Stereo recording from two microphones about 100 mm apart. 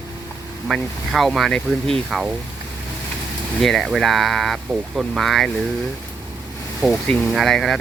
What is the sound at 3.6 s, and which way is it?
Speech, 5° left (ahead or behind).